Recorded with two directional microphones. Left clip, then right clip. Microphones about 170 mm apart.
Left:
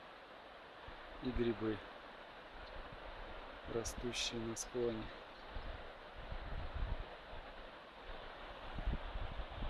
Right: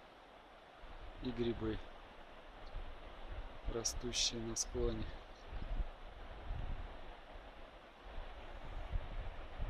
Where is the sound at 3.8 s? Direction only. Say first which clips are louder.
Right 3 dB; 15° right (ahead or behind).